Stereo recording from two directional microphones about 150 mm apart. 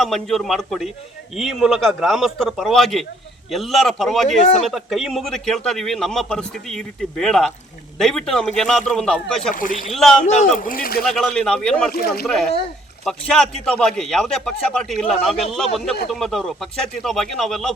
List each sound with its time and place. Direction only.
0.0 s a man's voice: centre (ahead or behind)
9.6 s speech: 65° left (ahead or behind)
9.9 s a man's voice: centre (ahead or behind)
10.6 s speech: 70° left (ahead or behind)
11.0 s a man's voice: centre (ahead or behind)
11.9 s speech: 85° left
12.2 s a man's voice: centre (ahead or behind)